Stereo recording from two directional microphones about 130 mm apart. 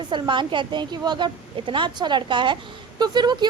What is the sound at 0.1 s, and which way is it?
A woman's voice, 40° right (ahead or behind).